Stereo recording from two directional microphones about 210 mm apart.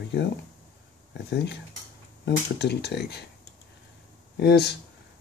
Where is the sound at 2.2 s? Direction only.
55° left (ahead or behind).